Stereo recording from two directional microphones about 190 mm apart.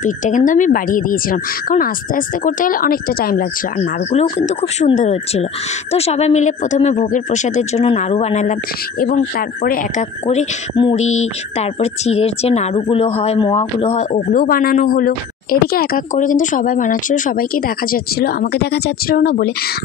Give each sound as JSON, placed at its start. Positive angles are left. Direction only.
{"t": 0.0, "sound": "speech", "side_deg": 40}
{"t": 4.1, "sound": "speech", "side_deg": 35}
{"t": 9.0, "sound": "speech", "side_deg": 50}
{"t": 10.2, "sound": "speech", "side_deg": 30}